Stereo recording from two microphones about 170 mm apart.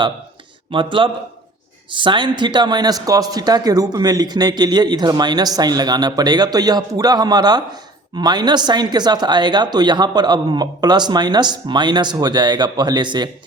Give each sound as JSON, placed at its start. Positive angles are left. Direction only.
{"t": 0.7, "sound": "speech", "side_deg": -30}